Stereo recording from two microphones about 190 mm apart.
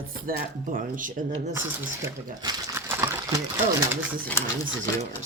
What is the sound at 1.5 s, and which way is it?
Speech, 10° right (ahead or behind).